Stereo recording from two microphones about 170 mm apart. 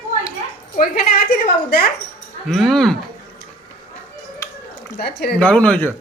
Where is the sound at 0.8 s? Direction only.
55° left (ahead or behind).